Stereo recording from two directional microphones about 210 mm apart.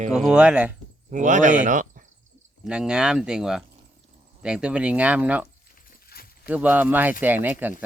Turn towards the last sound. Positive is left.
turn(degrees=-10)  # may be behind; listen again after turning